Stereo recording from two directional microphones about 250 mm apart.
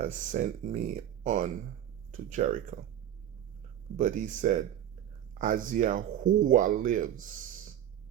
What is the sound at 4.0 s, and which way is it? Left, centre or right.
Speech, right.